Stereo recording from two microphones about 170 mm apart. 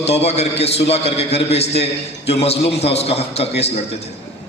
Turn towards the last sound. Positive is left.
turn(degrees=40)  # may be behind; listen again after turning